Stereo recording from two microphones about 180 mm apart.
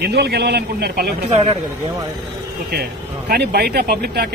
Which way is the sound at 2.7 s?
60° right (ahead or behind).